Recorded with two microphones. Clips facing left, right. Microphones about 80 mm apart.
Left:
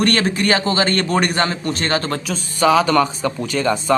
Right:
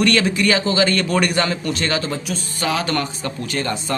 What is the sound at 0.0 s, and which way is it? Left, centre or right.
A man's voice, left.